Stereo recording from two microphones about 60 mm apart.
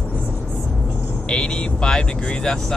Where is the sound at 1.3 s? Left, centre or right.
Centre.